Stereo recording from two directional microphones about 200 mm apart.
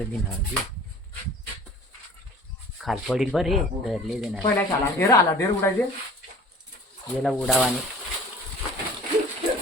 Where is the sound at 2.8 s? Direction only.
Centre (ahead or behind).